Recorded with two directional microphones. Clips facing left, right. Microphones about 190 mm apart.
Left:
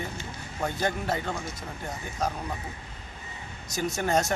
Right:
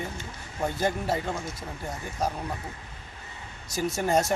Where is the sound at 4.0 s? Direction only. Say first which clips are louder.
Right 2 dB; 10° right (ahead or behind).